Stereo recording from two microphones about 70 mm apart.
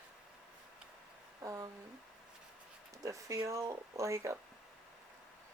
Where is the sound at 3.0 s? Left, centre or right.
Right.